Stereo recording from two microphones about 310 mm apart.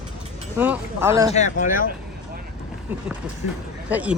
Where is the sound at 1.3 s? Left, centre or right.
Left.